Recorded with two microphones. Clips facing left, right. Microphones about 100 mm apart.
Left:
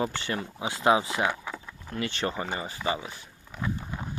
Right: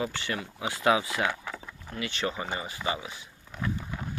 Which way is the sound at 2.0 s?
40° left (ahead or behind).